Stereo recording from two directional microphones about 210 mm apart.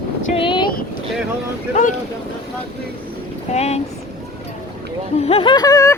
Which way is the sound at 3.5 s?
30° left (ahead or behind).